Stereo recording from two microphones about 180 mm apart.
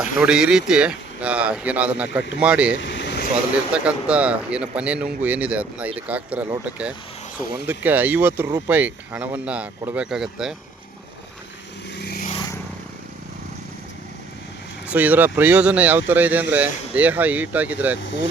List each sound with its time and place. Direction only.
0.0 s speech: 5° right (ahead or behind)
2.7 s vehicle: 75° left (ahead or behind)
3.7 s speech: 5° right (ahead or behind)
7.7 s speech: 10° right (ahead or behind)
8.4 s speech: 20° right (ahead or behind)
8.7 s speech: 10° right (ahead or behind)
11.9 s vehicle: 65° left (ahead or behind)
14.8 s speech: 10° right (ahead or behind)